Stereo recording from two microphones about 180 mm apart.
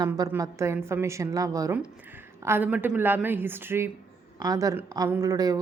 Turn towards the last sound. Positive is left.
turn(degrees=-20)  # may be behind; listen again after turning